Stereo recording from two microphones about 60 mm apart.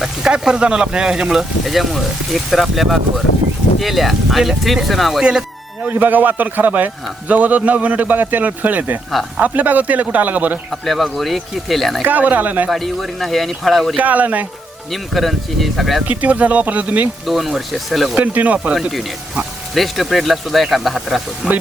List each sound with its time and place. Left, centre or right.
0.0 s speech: centre
5.2 s music: centre
5.9 s a man's voice: right
10.7 s speech: centre
12.0 s a man's voice: right
12.7 s speech: centre
13.9 s a man's voice: right
14.9 s speech: centre
16.0 s a man's voice: right
17.2 s speech: centre
18.1 s a man's voice: right
18.7 s speech: centre
21.4 s speech: centre